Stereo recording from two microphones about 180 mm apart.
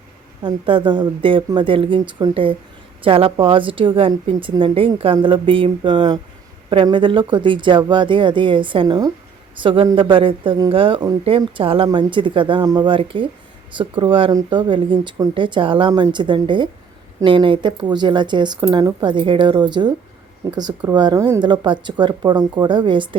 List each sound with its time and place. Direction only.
0.4 s speech: 30° right (ahead or behind)